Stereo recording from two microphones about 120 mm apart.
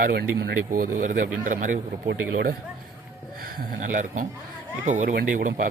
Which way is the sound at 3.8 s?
90° right.